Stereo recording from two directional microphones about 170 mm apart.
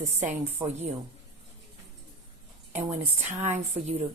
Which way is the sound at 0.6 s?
40° right (ahead or behind).